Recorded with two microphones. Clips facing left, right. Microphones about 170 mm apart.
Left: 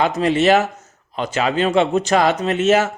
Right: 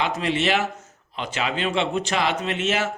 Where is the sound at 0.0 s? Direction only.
40° left (ahead or behind).